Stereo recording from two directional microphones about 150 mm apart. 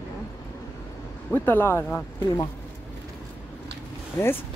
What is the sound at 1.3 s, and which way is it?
Speech, 15° left (ahead or behind).